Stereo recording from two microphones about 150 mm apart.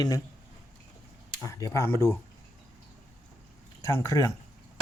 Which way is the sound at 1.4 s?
20° left (ahead or behind).